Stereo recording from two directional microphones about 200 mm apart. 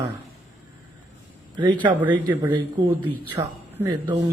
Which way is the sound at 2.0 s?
10° right (ahead or behind).